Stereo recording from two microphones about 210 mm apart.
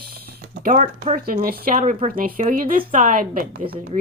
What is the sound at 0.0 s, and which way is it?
A woman's voice, 45° right (ahead or behind).